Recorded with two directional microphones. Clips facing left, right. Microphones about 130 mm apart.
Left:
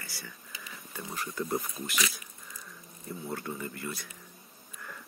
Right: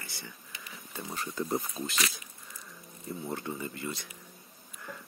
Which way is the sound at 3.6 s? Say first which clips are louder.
Right 1 dB; 20° right (ahead or behind).